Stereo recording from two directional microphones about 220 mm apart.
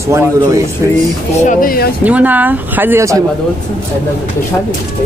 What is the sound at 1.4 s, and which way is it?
Speech, 40° left (ahead or behind).